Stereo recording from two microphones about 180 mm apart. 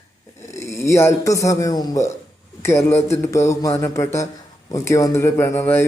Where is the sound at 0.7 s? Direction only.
15° left (ahead or behind).